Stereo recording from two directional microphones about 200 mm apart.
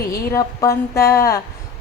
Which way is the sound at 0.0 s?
50° left (ahead or behind).